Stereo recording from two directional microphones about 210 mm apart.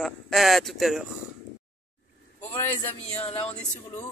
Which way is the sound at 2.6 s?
10° left (ahead or behind).